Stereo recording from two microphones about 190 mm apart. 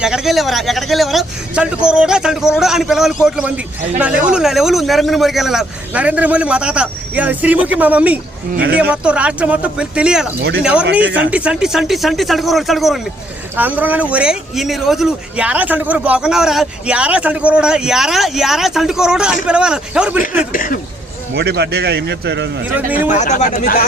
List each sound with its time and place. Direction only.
0.0 s speech: 5° right (ahead or behind)
8.5 s a man's voice: 55° right (ahead or behind)
8.8 s speech: 5° right (ahead or behind)
20.5 s speech: 45° left (ahead or behind)
21.3 s a man's voice: 60° right (ahead or behind)
23.0 s speech: 40° left (ahead or behind)